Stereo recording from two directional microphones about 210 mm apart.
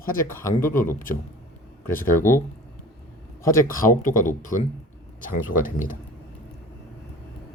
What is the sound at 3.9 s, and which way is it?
Speech, 40° left (ahead or behind).